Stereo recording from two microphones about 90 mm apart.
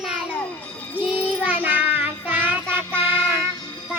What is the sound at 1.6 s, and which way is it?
Child singing, 20° right (ahead or behind).